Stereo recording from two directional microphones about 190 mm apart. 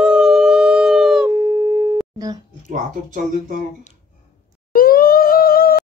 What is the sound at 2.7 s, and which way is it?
Speech, 40° right (ahead or behind).